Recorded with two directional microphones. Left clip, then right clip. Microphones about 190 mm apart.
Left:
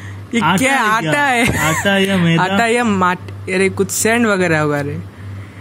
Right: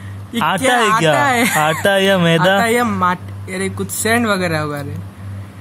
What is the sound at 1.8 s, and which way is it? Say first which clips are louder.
Speech: right 2 dB; 55° right (ahead or behind).